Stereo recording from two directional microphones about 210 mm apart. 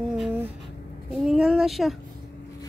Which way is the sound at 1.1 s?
Centre (ahead or behind).